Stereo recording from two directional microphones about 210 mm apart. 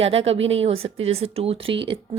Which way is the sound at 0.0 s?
30° right (ahead or behind).